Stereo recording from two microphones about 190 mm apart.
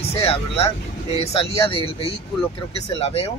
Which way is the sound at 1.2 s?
30° left (ahead or behind).